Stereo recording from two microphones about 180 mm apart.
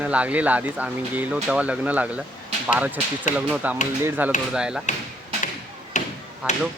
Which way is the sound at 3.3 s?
45° left (ahead or behind).